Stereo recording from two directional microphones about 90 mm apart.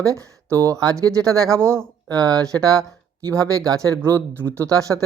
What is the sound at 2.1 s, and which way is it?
Speech, 40° right (ahead or behind).